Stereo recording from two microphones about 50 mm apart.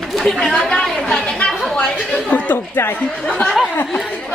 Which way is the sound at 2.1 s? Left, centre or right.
Left.